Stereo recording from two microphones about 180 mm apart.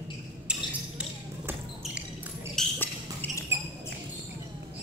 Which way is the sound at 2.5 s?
10° left (ahead or behind).